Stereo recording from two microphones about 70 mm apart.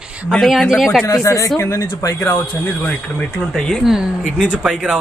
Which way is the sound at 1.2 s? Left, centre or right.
Left.